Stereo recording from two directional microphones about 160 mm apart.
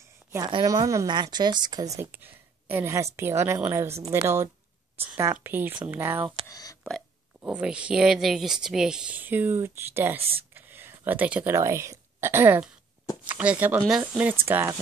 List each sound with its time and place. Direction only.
0.5 s speech: 25° right (ahead or behind)
2.0 s a woman's voice: 15° right (ahead or behind)
6.4 s speech: 20° left (ahead or behind)
7.4 s a woman's voice: 5° right (ahead or behind)